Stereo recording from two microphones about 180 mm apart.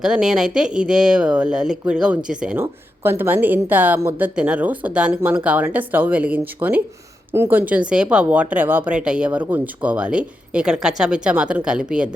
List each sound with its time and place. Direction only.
0.0 s speech: 5° right (ahead or behind)